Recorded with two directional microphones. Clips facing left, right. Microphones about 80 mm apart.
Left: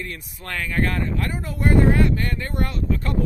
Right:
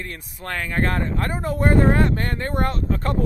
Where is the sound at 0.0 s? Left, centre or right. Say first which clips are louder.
Right 1 dB; right.